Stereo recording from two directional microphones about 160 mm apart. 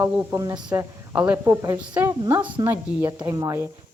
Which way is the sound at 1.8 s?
10° right (ahead or behind).